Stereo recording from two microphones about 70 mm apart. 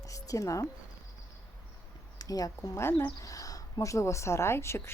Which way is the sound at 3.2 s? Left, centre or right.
Left.